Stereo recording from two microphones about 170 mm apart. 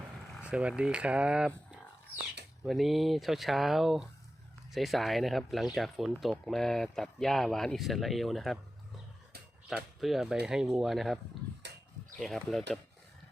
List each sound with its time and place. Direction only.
0.4 s speech: 5° right (ahead or behind)
9.6 s speech: centre (ahead or behind)
11.6 s a sound: 85° right
12.2 s speech: centre (ahead or behind)